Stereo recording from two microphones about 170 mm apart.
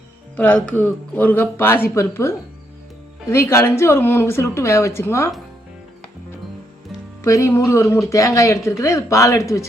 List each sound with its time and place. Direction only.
0.3 s a woman's voice: 5° left (ahead or behind)
7.2 s a woman's voice: 15° left (ahead or behind)